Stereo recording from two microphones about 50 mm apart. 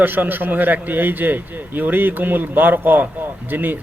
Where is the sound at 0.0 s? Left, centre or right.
Right.